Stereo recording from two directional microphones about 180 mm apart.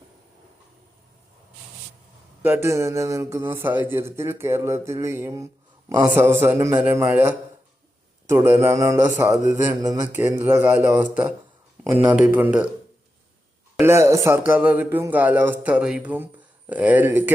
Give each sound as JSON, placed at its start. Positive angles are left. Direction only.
{"t": 2.4, "sound": "a man's voice", "side_deg": -10}
{"t": 8.3, "sound": "a man's voice", "side_deg": -15}
{"t": 9.5, "sound": "mantra", "side_deg": -20}
{"t": 10.1, "sound": "a man's voice", "side_deg": -15}
{"t": 13.7, "sound": "a man's voice", "side_deg": -15}